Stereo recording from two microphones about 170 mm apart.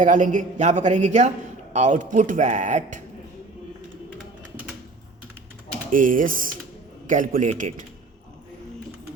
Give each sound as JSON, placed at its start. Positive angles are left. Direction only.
{"t": 0.0, "sound": "a woman's voice", "side_deg": -50}
{"t": 5.9, "sound": "a woman's voice", "side_deg": -50}